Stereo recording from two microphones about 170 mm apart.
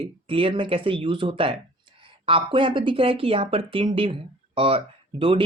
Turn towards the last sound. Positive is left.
turn(degrees=-30)  # may be behind; listen again after turning